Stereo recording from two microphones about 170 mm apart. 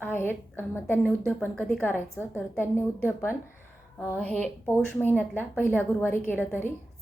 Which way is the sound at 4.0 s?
10° left (ahead or behind).